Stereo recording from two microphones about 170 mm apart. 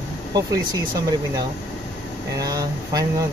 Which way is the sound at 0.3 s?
20° right (ahead or behind).